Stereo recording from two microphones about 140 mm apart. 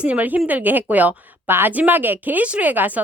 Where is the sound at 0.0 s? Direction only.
10° right (ahead or behind).